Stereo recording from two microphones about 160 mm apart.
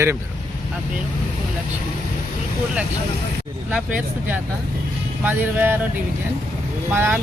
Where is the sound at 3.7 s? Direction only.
10° right (ahead or behind).